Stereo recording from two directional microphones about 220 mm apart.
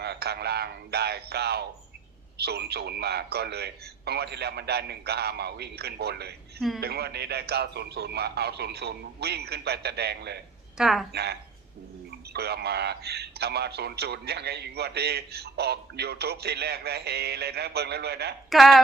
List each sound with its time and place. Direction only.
0.0 s a sound: 50° right (ahead or behind)
2.4 s a man's voice: 45° right (ahead or behind)
10.8 s speech: centre (ahead or behind)
11.1 s a man's voice: 50° right (ahead or behind)
18.5 s speech: centre (ahead or behind)